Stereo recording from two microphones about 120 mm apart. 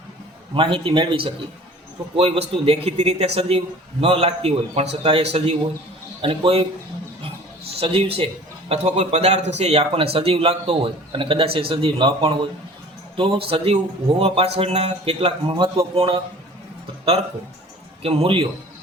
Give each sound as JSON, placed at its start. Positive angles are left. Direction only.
{"t": 0.5, "sound": "a man's voice", "side_deg": -45}
{"t": 2.1, "sound": "a man's voice", "side_deg": -55}
{"t": 7.8, "sound": "a man's voice", "side_deg": -55}
{"t": 18.0, "sound": "a man's voice", "side_deg": -50}